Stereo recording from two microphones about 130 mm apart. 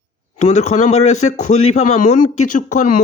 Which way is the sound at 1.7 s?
65° left (ahead or behind).